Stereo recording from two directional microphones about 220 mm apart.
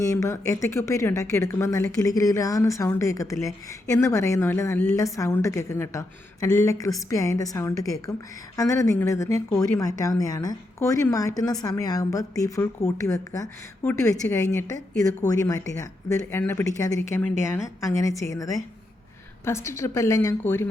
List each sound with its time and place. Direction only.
0.0 s a woman's voice: 15° left (ahead or behind)